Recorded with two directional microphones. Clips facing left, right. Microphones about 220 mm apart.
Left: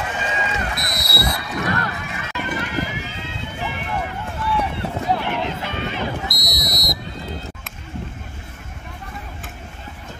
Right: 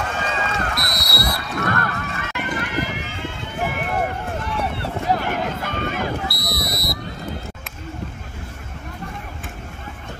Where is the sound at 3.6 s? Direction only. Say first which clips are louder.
Right 5 dB; 50° right (ahead or behind).